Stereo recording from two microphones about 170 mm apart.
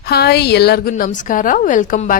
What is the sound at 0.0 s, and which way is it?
A woman's voice, 70° left (ahead or behind).